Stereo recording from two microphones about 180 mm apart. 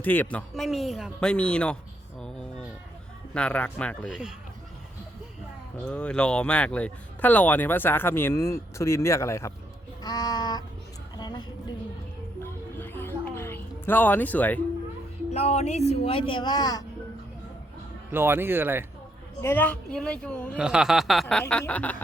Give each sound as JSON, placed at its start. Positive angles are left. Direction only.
{"t": 0.0, "sound": "speech", "side_deg": 10}
{"t": 4.1, "sound": "speech", "side_deg": -5}
{"t": 5.7, "sound": "speech", "side_deg": 5}
{"t": 10.0, "sound": "a sound", "side_deg": 20}
{"t": 12.4, "sound": "music", "side_deg": 10}
{"t": 15.3, "sound": "speech", "side_deg": 35}
{"t": 18.1, "sound": "speech", "side_deg": -10}
{"t": 19.4, "sound": "speech", "side_deg": 10}
{"t": 20.6, "sound": "speech", "side_deg": -5}